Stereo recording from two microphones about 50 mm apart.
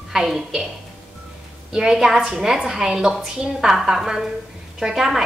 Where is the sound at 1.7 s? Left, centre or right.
Centre.